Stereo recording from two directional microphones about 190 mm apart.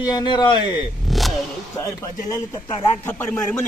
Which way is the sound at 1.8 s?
15° left (ahead or behind).